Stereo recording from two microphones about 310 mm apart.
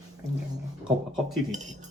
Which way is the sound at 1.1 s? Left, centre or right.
Centre.